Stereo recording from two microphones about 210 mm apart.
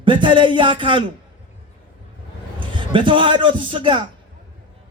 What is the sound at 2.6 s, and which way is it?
A man's voice, 25° right (ahead or behind).